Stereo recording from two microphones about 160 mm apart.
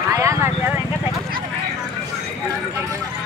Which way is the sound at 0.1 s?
20° right (ahead or behind).